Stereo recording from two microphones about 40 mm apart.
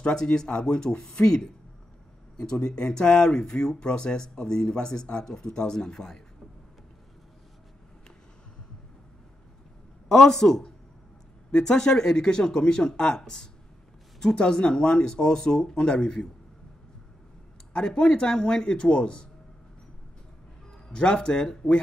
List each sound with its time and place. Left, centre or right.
0.0 s speech: centre
10.0 s a man's voice: centre
17.7 s speech: left
20.9 s speech: left